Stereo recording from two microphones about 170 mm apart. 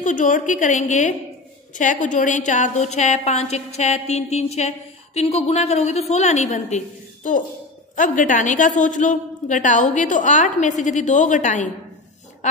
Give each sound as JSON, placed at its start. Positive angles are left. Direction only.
{"t": 0.0, "sound": "a woman's voice", "side_deg": 50}
{"t": 7.9, "sound": "a woman's voice", "side_deg": 50}